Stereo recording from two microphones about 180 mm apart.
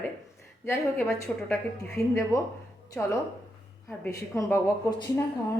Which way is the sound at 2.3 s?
20° left (ahead or behind).